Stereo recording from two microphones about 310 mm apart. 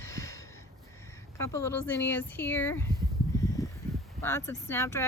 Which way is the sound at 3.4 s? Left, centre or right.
Centre.